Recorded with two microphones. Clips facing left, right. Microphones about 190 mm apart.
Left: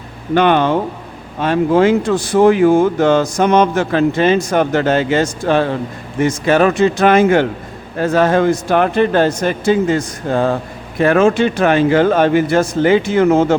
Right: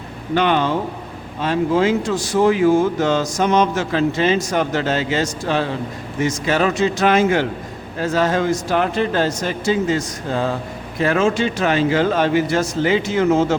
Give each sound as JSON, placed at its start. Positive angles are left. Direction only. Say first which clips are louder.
{"t": 0.3, "sound": "speech", "louder": "left 5 dB", "side_deg": 55}